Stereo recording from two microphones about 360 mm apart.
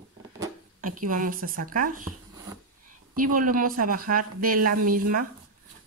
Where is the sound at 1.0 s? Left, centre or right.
Right.